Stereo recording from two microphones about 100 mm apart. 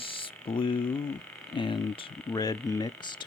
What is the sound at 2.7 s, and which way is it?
Speech, 35° left (ahead or behind).